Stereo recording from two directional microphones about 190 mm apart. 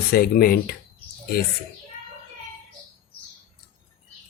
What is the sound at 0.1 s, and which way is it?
Speech, 55° left (ahead or behind).